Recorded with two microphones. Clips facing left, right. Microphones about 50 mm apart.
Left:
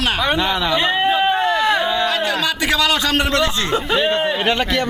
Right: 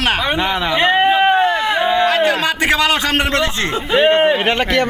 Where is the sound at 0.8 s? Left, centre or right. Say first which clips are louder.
Right 7 dB; right.